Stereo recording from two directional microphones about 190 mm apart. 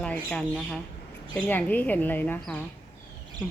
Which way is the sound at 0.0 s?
5° left (ahead or behind).